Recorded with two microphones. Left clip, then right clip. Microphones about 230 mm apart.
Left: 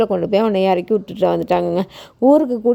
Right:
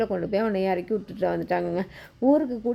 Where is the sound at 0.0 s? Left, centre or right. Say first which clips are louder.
Left 9 dB; left.